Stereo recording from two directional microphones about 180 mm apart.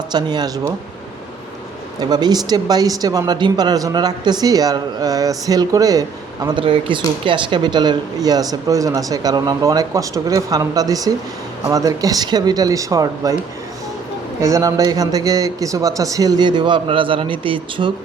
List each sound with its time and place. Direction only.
0.1 s speech: 25° right (ahead or behind)
2.0 s speech: 20° right (ahead or behind)
14.4 s speech: 20° right (ahead or behind)